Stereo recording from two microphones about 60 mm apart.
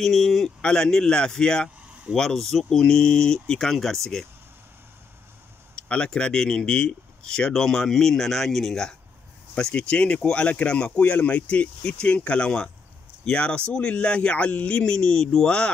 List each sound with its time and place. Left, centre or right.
0.0 s speech: centre
0.6 s speech: centre
5.8 s speech: centre